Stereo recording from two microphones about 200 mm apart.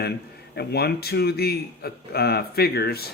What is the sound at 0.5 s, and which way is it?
Speech, 55° left (ahead or behind).